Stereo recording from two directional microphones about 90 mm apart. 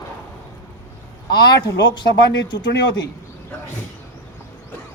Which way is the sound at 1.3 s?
55° left (ahead or behind).